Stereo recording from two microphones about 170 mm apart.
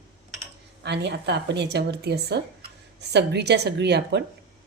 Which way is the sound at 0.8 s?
85° right.